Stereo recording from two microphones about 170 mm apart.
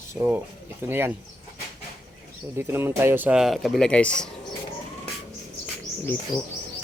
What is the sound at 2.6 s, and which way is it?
Speech, 15° right (ahead or behind).